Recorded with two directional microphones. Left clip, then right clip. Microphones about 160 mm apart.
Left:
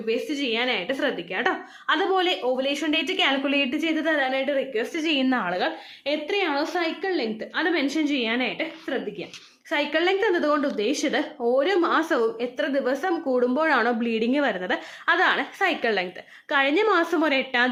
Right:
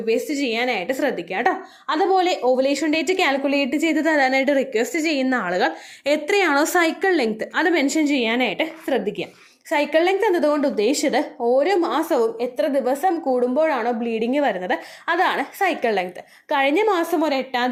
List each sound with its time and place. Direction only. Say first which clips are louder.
0.0 s a woman's voice: right 4 dB; 20° right (ahead or behind)
3.4 s a woman's voice: right 3 dB; 10° right (ahead or behind)
3.8 s a woman's voice: right 5 dB; 25° right (ahead or behind)
4.9 s a woman's voice: right 3 dB; 10° right (ahead or behind)
6.1 s a woman's voice: right 6 dB; 40° right (ahead or behind)
9.6 s a woman's voice: right 5 dB; 15° right (ahead or behind)
16.5 s a woman's voice: right 2 dB; 10° right (ahead or behind)